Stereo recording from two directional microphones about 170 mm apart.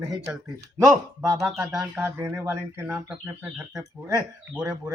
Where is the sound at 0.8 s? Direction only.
20° right (ahead or behind).